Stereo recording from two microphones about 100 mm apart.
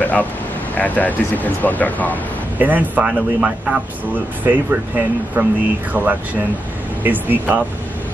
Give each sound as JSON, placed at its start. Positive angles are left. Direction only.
{"t": 0.0, "sound": "a sound", "side_deg": 15}
{"t": 0.7, "sound": "speech", "side_deg": 15}
{"t": 2.6, "sound": "speech", "side_deg": -15}